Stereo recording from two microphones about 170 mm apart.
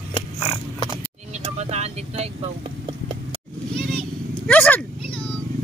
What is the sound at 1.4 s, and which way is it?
Vehicle, 40° right (ahead or behind).